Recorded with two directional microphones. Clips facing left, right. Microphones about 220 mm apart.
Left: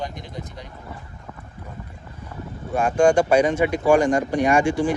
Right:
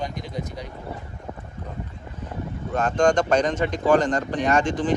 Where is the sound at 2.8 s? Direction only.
10° left (ahead or behind).